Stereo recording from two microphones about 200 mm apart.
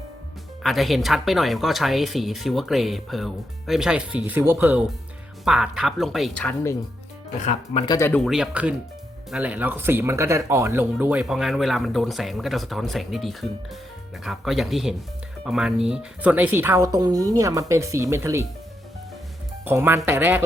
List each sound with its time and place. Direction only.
0.6 s speech: centre (ahead or behind)
7.4 s speech: 30° left (ahead or behind)
7.9 s speech: 15° left (ahead or behind)
8.2 s speech: centre (ahead or behind)
19.6 s speech: 10° right (ahead or behind)